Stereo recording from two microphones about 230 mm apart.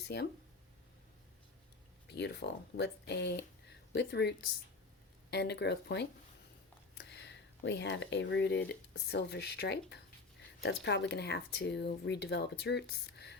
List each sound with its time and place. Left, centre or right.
2.0 s speech: left